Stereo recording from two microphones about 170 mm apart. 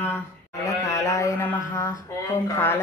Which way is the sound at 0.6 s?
20° left (ahead or behind).